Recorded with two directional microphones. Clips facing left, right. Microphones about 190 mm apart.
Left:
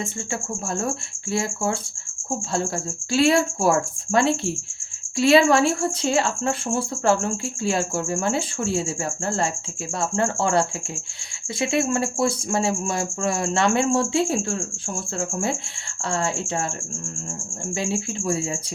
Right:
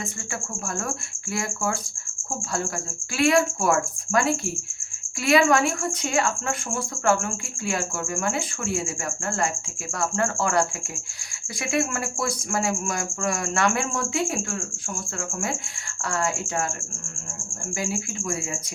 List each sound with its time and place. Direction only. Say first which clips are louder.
0.8 s speech: left 4 dB; 25° left (ahead or behind)
3.1 s speech: left 2 dB; 30° left (ahead or behind)
17.7 s speech: left 3 dB; 25° left (ahead or behind)